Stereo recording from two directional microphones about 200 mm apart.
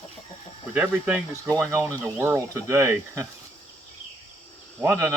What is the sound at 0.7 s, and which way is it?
Speech, 5° right (ahead or behind).